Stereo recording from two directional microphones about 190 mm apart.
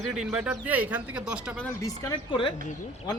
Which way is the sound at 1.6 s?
15° left (ahead or behind).